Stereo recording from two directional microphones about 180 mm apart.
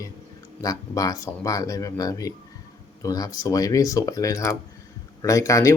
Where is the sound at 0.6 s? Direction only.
20° left (ahead or behind).